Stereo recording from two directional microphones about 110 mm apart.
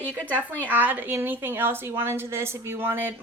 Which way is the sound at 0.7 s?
15° right (ahead or behind).